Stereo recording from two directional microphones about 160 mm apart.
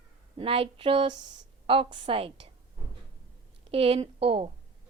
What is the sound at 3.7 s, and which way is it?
Speech, 35° right (ahead or behind).